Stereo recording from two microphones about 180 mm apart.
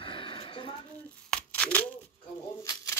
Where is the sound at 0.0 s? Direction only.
30° left (ahead or behind).